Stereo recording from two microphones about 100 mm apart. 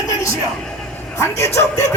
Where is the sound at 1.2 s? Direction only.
30° left (ahead or behind).